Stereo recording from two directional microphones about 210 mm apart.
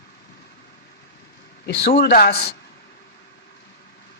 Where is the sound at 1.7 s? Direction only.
55° left (ahead or behind).